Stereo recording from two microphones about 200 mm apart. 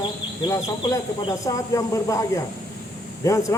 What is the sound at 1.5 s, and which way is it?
Speech, 15° left (ahead or behind).